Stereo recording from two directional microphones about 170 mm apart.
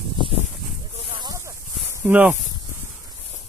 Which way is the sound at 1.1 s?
20° right (ahead or behind).